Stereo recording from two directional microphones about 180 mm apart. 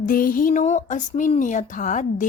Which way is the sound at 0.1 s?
50° left (ahead or behind).